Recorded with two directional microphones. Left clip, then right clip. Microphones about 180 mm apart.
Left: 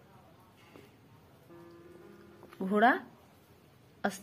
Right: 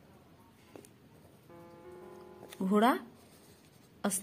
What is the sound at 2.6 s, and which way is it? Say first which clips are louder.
Speech: left 2 dB; 25° right (ahead or behind).